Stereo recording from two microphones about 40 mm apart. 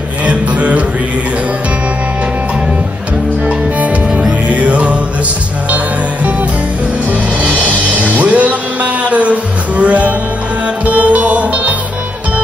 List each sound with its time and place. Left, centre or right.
0.2 s music: right
4.5 s music: right
7.1 s music: right